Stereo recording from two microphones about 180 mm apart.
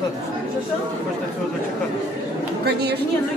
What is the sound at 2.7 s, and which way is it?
Speech, 65° right (ahead or behind).